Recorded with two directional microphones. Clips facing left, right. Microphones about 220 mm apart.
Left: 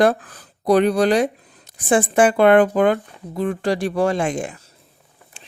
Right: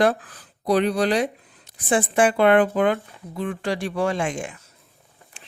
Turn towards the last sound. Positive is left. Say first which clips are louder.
# left 4 dB
turn(degrees=40)  # may be behind; listen again after turning